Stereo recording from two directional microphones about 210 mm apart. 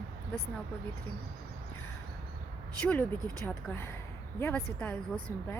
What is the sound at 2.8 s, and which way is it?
Speech, 5° left (ahead or behind).